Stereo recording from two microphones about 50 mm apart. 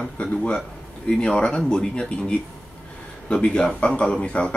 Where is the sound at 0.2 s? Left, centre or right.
Left.